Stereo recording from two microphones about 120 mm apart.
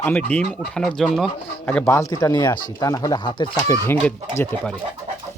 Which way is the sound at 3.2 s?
45° left (ahead or behind).